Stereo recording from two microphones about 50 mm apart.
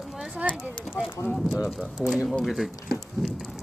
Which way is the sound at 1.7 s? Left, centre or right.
Centre.